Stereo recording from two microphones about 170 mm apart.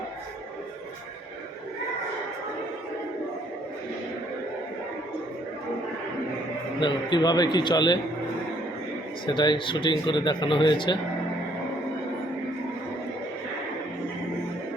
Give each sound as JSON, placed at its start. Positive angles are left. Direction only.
{"t": 6.7, "sound": "a man's voice", "side_deg": 25}
{"t": 9.2, "sound": "a man's voice", "side_deg": 25}